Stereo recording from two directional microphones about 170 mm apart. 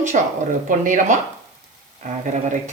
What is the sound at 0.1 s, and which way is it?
Speech, 50° right (ahead or behind).